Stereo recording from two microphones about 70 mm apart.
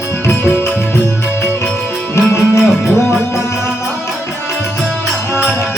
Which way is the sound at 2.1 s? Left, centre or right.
Left.